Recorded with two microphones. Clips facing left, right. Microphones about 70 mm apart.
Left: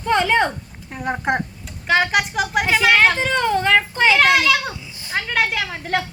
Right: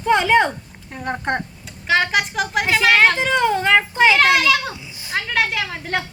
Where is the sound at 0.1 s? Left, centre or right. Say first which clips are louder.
Right 2 dB; centre.